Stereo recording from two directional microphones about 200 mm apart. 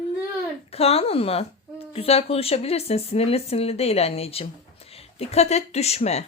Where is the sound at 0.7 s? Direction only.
30° left (ahead or behind).